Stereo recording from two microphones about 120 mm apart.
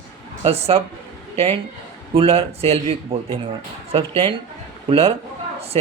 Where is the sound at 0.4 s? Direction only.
55° right (ahead or behind).